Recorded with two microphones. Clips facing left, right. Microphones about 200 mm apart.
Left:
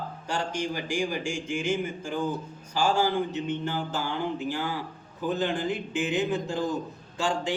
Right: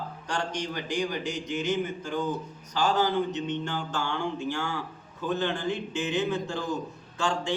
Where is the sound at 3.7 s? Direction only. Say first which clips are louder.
Left 1 dB; 15° left (ahead or behind).